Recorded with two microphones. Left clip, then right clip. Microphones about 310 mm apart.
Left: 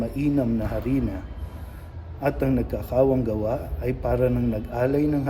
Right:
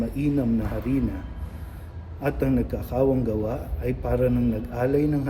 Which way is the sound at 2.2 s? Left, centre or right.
Centre.